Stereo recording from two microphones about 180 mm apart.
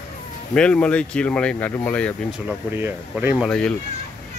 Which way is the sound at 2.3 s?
10° right (ahead or behind).